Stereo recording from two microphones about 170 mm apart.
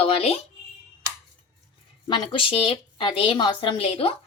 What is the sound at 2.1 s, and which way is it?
A woman's voice, 30° left (ahead or behind).